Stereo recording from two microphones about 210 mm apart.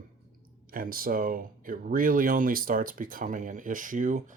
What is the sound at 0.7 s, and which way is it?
Speech, 45° right (ahead or behind).